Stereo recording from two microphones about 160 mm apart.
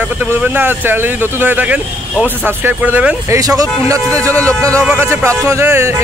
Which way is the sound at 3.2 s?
20° right (ahead or behind).